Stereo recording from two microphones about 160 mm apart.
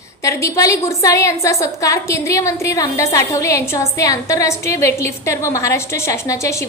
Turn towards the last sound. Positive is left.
turn(degrees=20)  # may be behind; listen again after turning